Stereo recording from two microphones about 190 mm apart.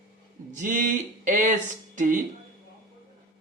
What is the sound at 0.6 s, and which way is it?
Speech, 45° right (ahead or behind).